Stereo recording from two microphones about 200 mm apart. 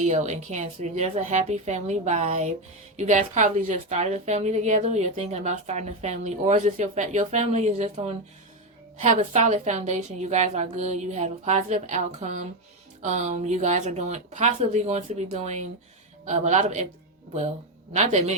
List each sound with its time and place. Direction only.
0.0 s a woman's voice: 35° right (ahead or behind)
17.9 s a woman's voice: 35° right (ahead or behind)